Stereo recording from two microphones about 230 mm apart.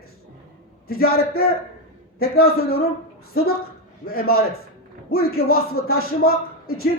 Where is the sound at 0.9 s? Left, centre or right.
Left.